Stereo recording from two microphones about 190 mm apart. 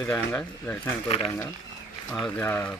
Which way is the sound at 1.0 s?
30° left (ahead or behind).